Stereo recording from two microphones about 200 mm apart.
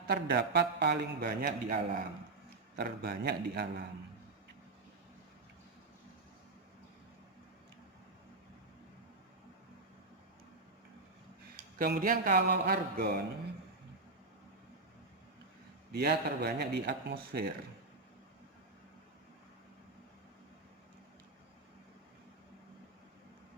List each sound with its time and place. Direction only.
0.1 s a man's voice: 55° right (ahead or behind)
11.8 s speech: 45° right (ahead or behind)
15.9 s speech: 50° right (ahead or behind)